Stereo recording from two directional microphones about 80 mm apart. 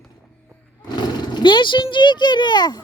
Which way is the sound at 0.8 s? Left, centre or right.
Left.